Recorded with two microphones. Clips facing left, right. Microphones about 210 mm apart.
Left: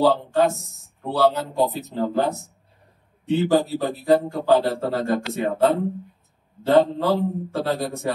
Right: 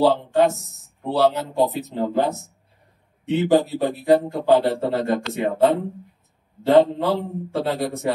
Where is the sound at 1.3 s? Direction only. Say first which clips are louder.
Right 1 dB; 20° right (ahead or behind).